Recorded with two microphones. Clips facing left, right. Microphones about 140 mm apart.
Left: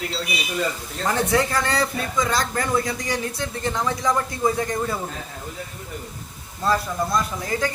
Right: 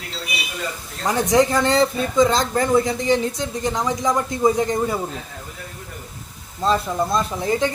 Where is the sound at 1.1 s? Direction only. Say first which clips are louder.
Right 4 dB; 15° right (ahead or behind).